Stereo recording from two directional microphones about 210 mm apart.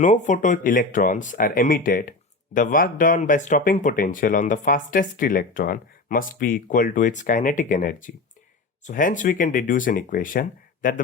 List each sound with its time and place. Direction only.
0.0 s speech: 35° left (ahead or behind)